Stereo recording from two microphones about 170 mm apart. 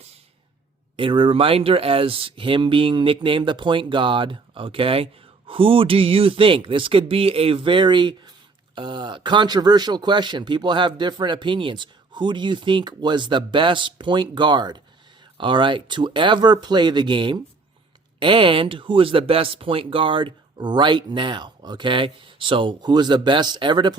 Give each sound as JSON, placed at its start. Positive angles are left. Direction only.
{"t": 0.9, "sound": "speech", "side_deg": -30}